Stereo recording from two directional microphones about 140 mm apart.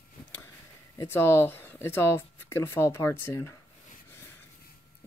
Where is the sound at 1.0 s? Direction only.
15° left (ahead or behind).